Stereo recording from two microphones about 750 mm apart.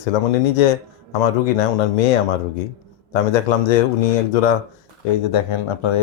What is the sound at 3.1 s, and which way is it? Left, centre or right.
Speech, left.